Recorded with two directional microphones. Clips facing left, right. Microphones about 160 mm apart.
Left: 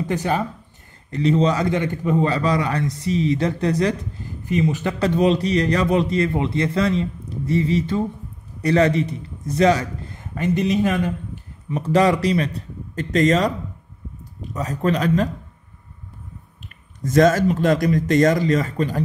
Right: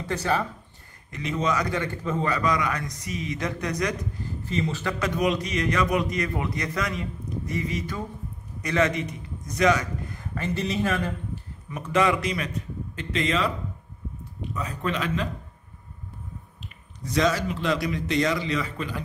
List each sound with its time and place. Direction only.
0.0 s a man's voice: 20° left (ahead or behind)
1.1 s a man's voice: 30° left (ahead or behind)
2.3 s a man's voice: 30° left (ahead or behind)
4.2 s speech: 15° left (ahead or behind)
4.9 s a man's voice: 30° left (ahead or behind)
11.7 s speech: 35° left (ahead or behind)
16.6 s speech: 50° left (ahead or behind)